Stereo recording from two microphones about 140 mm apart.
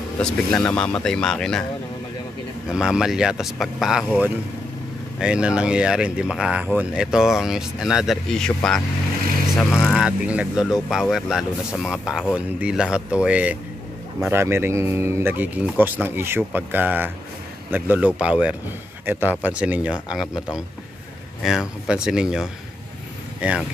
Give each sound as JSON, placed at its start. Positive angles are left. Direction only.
{"t": 0.2, "sound": "speech", "side_deg": 5}
{"t": 2.7, "sound": "speech", "side_deg": -5}
{"t": 9.6, "sound": "speech", "side_deg": 0}